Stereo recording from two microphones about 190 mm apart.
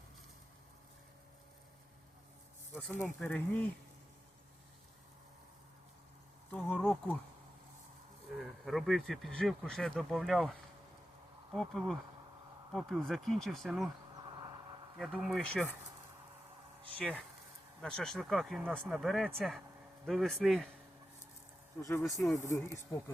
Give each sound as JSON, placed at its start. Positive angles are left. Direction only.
{"t": 2.7, "sound": "speech", "side_deg": 10}
{"t": 6.5, "sound": "insect", "side_deg": 5}
{"t": 8.4, "sound": "speech", "side_deg": 0}
{"t": 11.5, "sound": "speech", "side_deg": 5}
{"t": 14.9, "sound": "speech", "side_deg": 0}
{"t": 17.0, "sound": "speech", "side_deg": 5}
{"t": 21.8, "sound": "speech", "side_deg": 15}